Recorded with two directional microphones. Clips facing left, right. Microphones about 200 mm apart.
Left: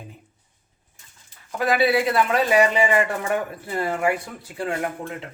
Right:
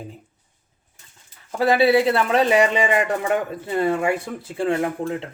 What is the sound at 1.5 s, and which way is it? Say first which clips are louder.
Speech: right 4 dB; 30° right (ahead or behind).